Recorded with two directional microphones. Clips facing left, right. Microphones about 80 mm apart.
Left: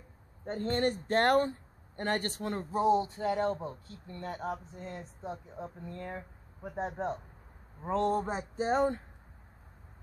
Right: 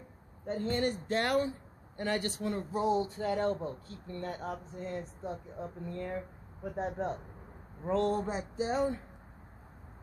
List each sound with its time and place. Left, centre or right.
0.5 s speech: left
2.8 s speech: left
7.9 s a sound: left